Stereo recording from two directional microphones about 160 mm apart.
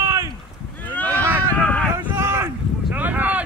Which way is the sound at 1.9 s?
15° right (ahead or behind).